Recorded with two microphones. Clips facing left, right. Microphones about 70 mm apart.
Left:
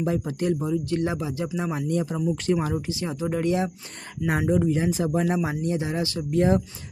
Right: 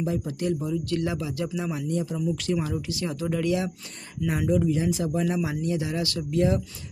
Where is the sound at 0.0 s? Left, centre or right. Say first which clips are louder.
Left 2 dB; left.